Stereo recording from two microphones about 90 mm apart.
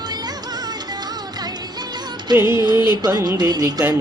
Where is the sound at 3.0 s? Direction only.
40° right (ahead or behind).